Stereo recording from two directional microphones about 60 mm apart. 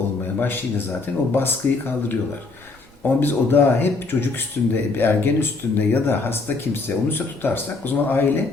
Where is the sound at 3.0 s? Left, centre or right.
Left.